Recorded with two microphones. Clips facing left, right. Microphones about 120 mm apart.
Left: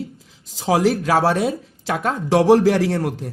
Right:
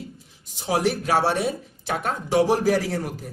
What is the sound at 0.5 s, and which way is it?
Speech, 90° left.